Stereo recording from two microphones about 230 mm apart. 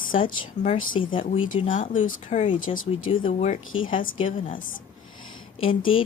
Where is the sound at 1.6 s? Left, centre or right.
Left.